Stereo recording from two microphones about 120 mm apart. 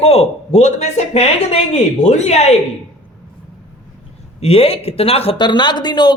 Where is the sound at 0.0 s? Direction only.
60° left (ahead or behind).